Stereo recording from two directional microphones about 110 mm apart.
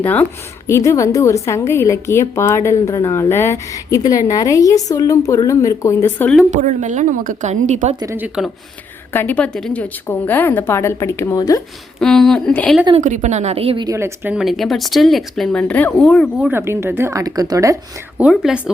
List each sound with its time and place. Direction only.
0.0 s a woman's voice: 15° left (ahead or behind)
0.7 s a woman's voice: 30° left (ahead or behind)
6.5 s a woman's voice: 90° right
8.4 s speech: 5° right (ahead or behind)
9.1 s a woman's voice: 15° left (ahead or behind); by 11.6 s 35° left (ahead or behind)
11.9 s speech: 5° left (ahead or behind)
13.0 s a woman's voice: 90° right; by 13.7 s 70° right (ahead or behind)
13.9 s speech: 25° right (ahead or behind)
14.3 s speech: centre (ahead or behind)
16.5 s speech: 20° right (ahead or behind)
18.2 s speech: 10° right (ahead or behind)